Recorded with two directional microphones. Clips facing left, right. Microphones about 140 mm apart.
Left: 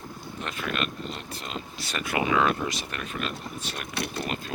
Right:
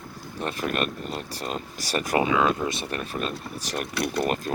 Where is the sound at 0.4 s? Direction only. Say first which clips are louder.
Right 4 dB; 40° right (ahead or behind).